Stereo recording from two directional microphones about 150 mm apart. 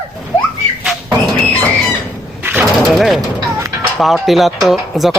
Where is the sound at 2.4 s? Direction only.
10° right (ahead or behind).